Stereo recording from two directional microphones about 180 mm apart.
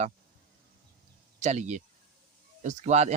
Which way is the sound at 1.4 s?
40° right (ahead or behind).